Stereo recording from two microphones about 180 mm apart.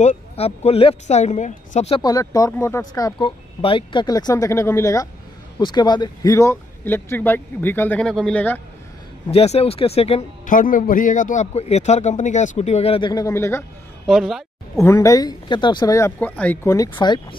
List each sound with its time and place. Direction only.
0.0 s a man's voice: 35° left (ahead or behind)
2.0 s speech: 20° left (ahead or behind)
9.3 s a man's voice: 35° left (ahead or behind)
10.5 s a man's voice: 50° left (ahead or behind); by 13.7 s 15° left (ahead or behind)
14.0 s a man's voice: centre (ahead or behind)
14.8 s speech: 15° left (ahead or behind)